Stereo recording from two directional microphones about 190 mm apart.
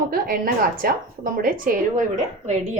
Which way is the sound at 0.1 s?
50° right (ahead or behind).